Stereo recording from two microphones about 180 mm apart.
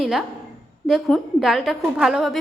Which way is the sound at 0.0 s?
5° right (ahead or behind).